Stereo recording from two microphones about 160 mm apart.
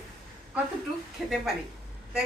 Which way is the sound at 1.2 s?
5° right (ahead or behind).